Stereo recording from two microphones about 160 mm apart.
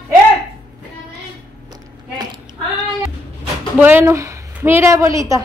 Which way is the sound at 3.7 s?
10° right (ahead or behind).